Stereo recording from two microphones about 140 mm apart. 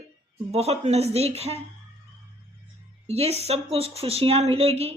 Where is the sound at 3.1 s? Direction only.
50° right (ahead or behind).